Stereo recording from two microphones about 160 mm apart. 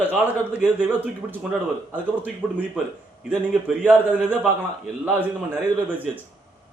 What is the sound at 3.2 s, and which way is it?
A man's voice, 5° right (ahead or behind).